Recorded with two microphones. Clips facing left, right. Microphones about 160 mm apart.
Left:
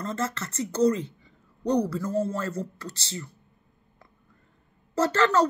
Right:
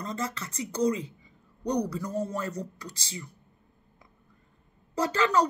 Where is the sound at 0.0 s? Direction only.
15° right (ahead or behind).